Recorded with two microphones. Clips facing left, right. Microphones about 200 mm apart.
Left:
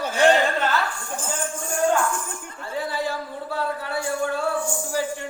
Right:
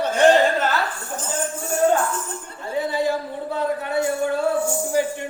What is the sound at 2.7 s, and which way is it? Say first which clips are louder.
Speech: right 5 dB; 20° right (ahead or behind).